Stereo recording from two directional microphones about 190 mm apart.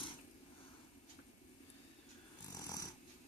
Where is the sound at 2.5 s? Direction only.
20° left (ahead or behind).